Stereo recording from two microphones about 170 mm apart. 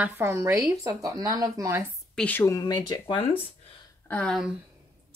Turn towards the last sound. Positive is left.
turn(degrees=0)  # may be behind; listen again after turning